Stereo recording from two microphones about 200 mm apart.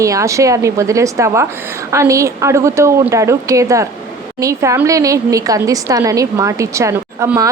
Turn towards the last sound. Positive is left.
turn(degrees=-15)  # may be behind; listen again after turning